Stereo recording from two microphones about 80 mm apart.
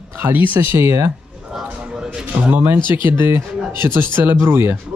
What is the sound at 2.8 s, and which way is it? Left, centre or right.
Speech, left.